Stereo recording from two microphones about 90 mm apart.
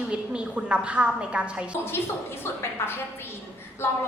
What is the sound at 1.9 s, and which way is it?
Speech, 25° left (ahead or behind).